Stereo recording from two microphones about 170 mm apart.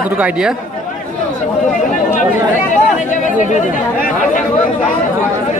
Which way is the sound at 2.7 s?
45° left (ahead or behind).